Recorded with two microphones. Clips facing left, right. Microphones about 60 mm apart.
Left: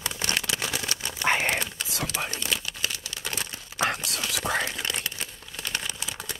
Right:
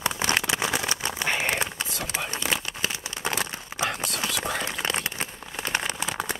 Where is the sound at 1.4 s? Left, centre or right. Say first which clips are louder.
Right 1 dB; right.